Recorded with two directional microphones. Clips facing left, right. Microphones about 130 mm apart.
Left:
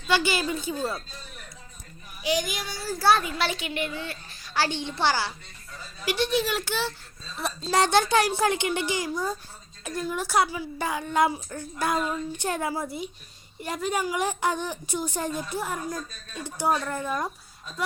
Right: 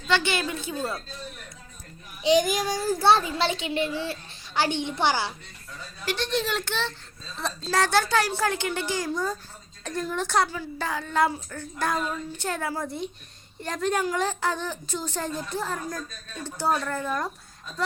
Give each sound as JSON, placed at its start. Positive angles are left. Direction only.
{"t": 0.1, "sound": "a woman's voice", "side_deg": 5}
{"t": 2.4, "sound": "speech", "side_deg": -40}
{"t": 3.0, "sound": "a child's voice", "side_deg": -30}
{"t": 6.1, "sound": "a woman's voice", "side_deg": 10}
{"t": 7.8, "sound": "a woman's voice", "side_deg": 20}